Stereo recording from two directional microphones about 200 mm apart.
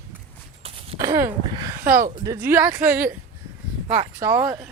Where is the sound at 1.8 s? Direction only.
45° right (ahead or behind).